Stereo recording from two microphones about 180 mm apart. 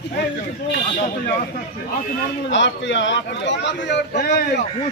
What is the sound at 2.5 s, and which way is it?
A man's voice, 85° left.